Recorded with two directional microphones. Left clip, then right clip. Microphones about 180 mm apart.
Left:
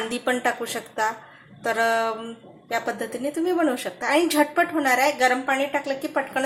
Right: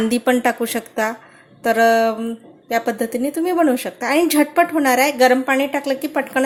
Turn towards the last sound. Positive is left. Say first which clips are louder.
# right 5 dB
turn(degrees=-40)  # may be behind; listen again after turning